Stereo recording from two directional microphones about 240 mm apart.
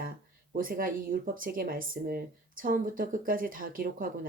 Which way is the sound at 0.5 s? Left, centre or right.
Right.